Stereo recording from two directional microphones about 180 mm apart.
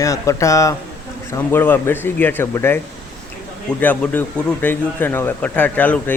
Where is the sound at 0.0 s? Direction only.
15° left (ahead or behind).